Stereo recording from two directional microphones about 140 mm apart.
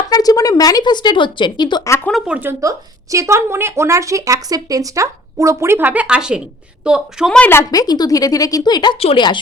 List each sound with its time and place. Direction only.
0.1 s a woman's voice: 25° left (ahead or behind)
2.2 s a woman's voice: 10° right (ahead or behind)
7.3 s a woman's voice: 10° left (ahead or behind)
7.7 s speech: 30° left (ahead or behind)